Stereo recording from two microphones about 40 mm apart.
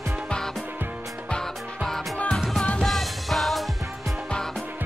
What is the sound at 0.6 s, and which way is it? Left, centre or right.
Music, right.